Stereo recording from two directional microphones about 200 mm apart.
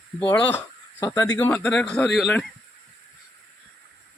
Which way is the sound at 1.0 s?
15° left (ahead or behind).